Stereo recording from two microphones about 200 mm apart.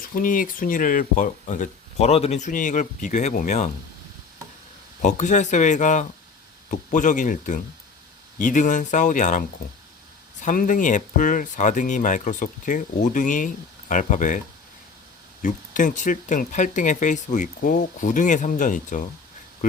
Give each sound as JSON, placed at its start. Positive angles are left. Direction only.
{"t": 0.2, "sound": "speech", "side_deg": 45}
{"t": 5.0, "sound": "speech", "side_deg": 35}
{"t": 10.4, "sound": "speech", "side_deg": 40}